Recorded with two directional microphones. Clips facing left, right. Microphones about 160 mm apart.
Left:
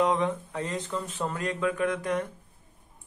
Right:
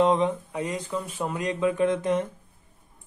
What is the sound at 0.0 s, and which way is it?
Speech, 20° right (ahead or behind).